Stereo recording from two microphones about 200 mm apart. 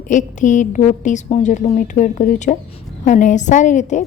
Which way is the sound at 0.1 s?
40° left (ahead or behind).